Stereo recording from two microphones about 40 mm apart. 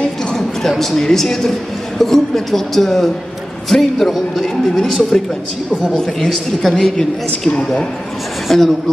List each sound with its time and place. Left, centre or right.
0.0 s a sound: centre
0.7 s a woman's voice: centre
5.9 s a woman's voice: centre
7.4 s a woman's voice: centre
8.5 s a man's voice: centre